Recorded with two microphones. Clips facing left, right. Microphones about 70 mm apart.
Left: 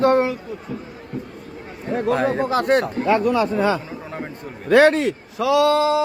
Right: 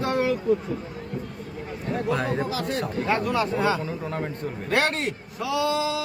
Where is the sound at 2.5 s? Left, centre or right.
Left.